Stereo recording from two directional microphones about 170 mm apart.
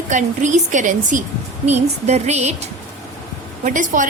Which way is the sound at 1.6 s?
40° right (ahead or behind).